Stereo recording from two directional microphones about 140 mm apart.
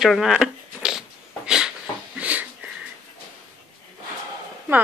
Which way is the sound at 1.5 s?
5° right (ahead or behind).